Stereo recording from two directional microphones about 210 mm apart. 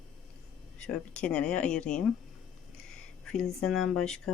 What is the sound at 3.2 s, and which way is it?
Speech, 5° left (ahead or behind).